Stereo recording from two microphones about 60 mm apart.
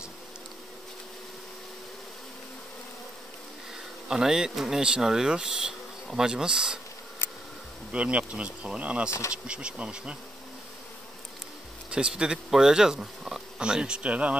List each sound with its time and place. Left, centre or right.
4.1 s speech: centre
7.9 s bee: right
9.3 s speech: centre
11.9 s speech: centre